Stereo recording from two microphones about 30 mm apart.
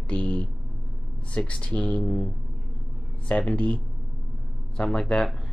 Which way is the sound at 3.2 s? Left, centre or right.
Left.